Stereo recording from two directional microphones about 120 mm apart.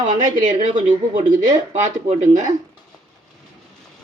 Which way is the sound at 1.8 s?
85° right.